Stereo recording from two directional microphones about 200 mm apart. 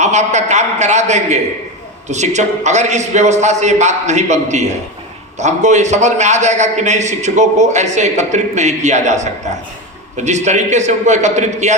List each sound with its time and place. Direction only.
0.0 s a man's voice: 35° right (ahead or behind)